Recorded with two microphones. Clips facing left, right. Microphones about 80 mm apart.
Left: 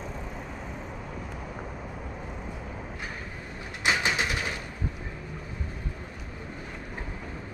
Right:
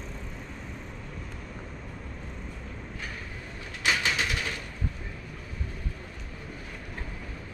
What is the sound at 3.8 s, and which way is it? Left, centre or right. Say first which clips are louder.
Bird: left 1 dB; left.